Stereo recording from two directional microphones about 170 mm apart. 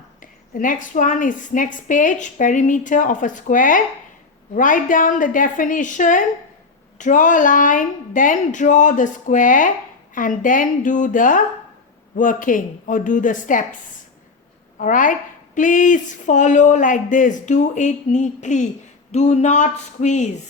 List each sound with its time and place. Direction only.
0.2 s a woman's voice: 50° left (ahead or behind)
14.8 s a woman's voice: 50° left (ahead or behind)